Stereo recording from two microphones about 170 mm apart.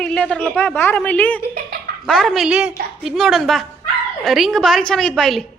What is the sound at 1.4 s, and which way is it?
Speech, 70° right (ahead or behind).